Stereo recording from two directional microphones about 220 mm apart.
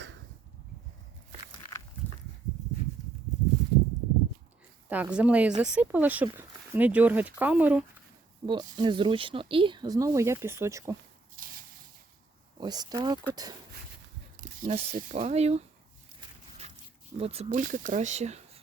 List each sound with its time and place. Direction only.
4.9 s speech: 5° right (ahead or behind)
8.4 s speech: 20° right (ahead or behind)
12.5 s speech: 20° right (ahead or behind)
14.4 s speech: 35° right (ahead or behind)
17.2 s speech: 25° right (ahead or behind)